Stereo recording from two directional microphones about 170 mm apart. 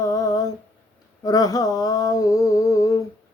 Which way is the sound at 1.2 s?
20° left (ahead or behind).